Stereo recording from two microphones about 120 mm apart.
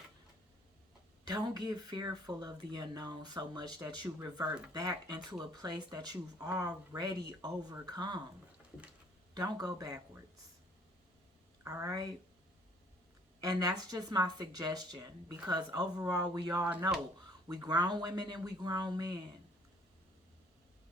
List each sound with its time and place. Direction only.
1.3 s speech: 35° right (ahead or behind)
9.3 s speech: 35° right (ahead or behind)
11.6 s speech: 30° right (ahead or behind)
13.4 s speech: 30° right (ahead or behind)